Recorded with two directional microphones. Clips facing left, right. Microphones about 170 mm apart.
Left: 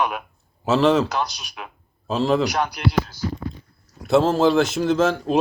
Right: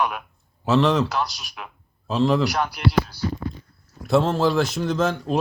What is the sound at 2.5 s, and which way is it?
Speech, centre (ahead or behind).